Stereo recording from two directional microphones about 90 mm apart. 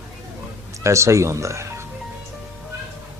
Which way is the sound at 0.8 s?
35° right (ahead or behind).